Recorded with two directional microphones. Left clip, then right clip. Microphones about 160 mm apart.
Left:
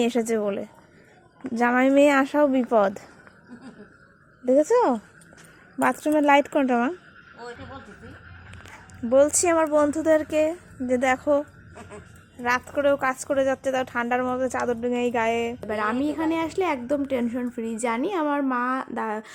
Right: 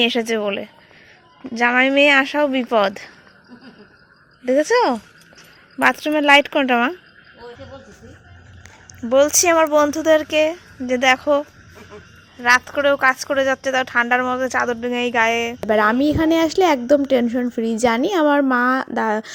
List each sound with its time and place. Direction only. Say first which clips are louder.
0.0 s a woman's voice: right 5 dB; 10° left (ahead or behind)
1.5 s a woman's voice: right 4 dB; 15° left (ahead or behind)
6.1 s a woman's voice: right 5 dB; 5° left (ahead or behind)
9.1 s a woman's voice: right 5 dB; centre (ahead or behind)
11.1 s a woman's voice: right 7 dB; 5° left (ahead or behind)
12.4 s a woman's voice: right 8 dB; centre (ahead or behind)
15.6 s a woman's voice: right 10 dB; 40° right (ahead or behind)